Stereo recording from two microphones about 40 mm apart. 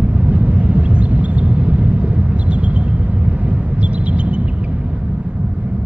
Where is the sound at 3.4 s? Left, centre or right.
Right.